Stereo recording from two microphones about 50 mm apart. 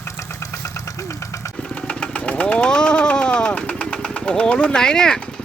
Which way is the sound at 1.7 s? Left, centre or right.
Left.